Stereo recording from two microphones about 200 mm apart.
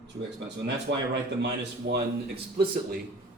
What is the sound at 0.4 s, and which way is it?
A man's voice, 60° right (ahead or behind).